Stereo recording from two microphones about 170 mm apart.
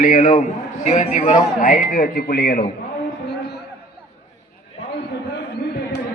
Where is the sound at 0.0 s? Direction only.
50° left (ahead or behind).